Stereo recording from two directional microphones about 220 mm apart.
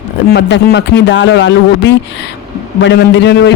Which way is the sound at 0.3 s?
50° left (ahead or behind).